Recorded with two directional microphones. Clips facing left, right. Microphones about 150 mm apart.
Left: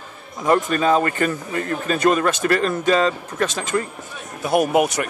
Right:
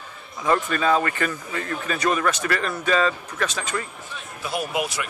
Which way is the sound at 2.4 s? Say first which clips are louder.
Left 6 dB; 40° left (ahead or behind).